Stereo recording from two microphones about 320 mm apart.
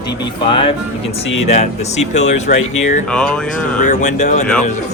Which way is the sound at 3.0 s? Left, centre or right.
Centre.